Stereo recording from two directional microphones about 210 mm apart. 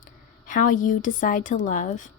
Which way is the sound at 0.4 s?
40° left (ahead or behind).